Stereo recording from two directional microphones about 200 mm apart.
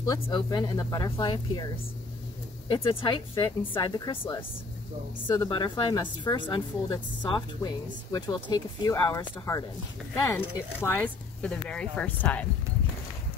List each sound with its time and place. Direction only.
0.0 s speech: 20° left (ahead or behind)
2.7 s speech: 25° left (ahead or behind); by 12.4 s 5° left (ahead or behind)